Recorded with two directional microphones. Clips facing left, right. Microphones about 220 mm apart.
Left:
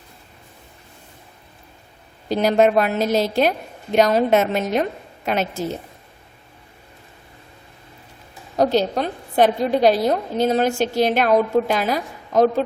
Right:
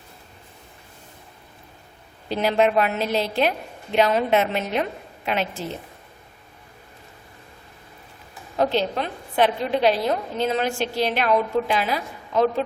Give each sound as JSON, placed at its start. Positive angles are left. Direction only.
{"t": 2.3, "sound": "a woman's voice", "side_deg": 40}
{"t": 8.5, "sound": "a woman's voice", "side_deg": 40}